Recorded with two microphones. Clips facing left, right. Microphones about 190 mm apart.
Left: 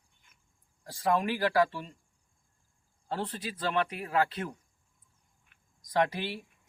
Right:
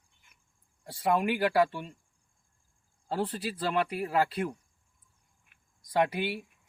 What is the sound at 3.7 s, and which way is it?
Speech, 5° right (ahead or behind).